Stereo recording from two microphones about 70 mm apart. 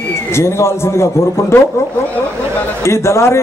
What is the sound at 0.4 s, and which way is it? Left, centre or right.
Speech, left.